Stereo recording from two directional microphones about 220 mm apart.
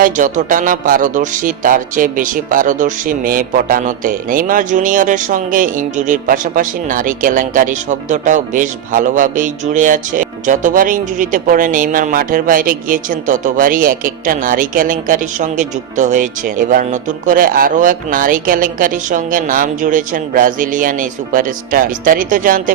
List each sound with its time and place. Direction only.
0.0 s speech: 35° right (ahead or behind)